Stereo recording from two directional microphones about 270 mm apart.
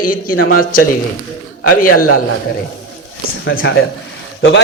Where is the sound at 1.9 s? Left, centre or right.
Left.